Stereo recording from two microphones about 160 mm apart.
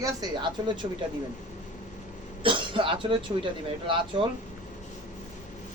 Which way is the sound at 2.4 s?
30° right (ahead or behind).